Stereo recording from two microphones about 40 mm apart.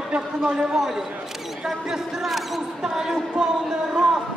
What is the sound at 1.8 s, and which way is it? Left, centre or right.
A man's voice, centre.